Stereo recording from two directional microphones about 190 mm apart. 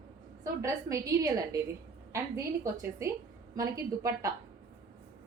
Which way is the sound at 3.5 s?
15° right (ahead or behind).